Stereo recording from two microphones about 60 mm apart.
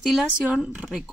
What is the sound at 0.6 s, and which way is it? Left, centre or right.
Speech, centre.